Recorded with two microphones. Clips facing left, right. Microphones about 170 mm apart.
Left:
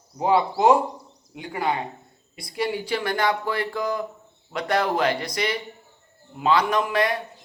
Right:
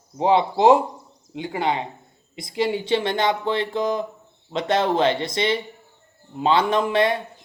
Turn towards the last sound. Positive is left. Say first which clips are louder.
# right 3 dB
turn(degrees=-25)  # may be behind; listen again after turning